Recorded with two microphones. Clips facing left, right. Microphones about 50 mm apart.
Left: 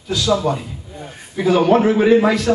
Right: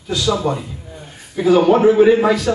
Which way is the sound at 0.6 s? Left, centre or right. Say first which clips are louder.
Even; centre.